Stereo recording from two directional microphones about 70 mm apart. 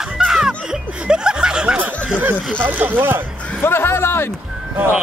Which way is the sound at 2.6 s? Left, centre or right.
Right.